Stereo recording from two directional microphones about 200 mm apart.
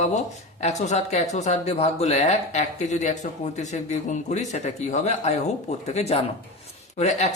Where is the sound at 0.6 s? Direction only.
35° left (ahead or behind).